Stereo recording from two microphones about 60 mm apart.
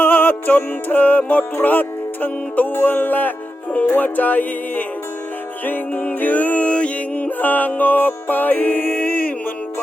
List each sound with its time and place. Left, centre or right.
0.0 s music: left